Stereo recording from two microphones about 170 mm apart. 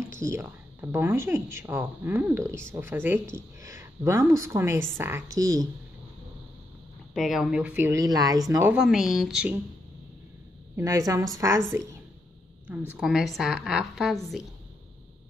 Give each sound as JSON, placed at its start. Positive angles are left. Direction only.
{"t": 0.2, "sound": "speech", "side_deg": -15}
{"t": 7.2, "sound": "speech", "side_deg": 0}
{"t": 8.7, "sound": "a woman's voice", "side_deg": -5}
{"t": 10.8, "sound": "a woman's voice", "side_deg": -20}